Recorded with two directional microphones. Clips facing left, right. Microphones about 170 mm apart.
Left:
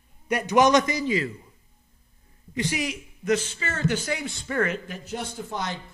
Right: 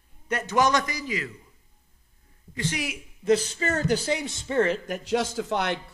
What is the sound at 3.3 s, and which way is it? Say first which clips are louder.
Speech: right 3 dB; 40° right (ahead or behind).